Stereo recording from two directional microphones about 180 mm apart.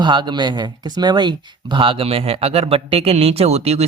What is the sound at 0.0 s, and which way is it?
Speech, 25° right (ahead or behind).